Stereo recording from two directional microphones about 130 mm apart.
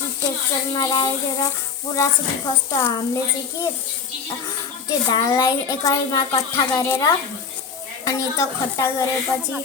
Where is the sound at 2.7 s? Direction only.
25° left (ahead or behind).